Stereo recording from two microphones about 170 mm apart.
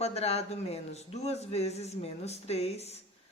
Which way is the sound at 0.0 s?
40° left (ahead or behind).